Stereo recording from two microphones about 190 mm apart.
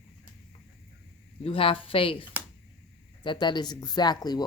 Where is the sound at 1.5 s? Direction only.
30° left (ahead or behind).